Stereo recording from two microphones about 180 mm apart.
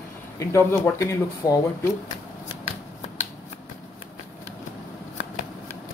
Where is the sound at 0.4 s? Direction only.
15° left (ahead or behind).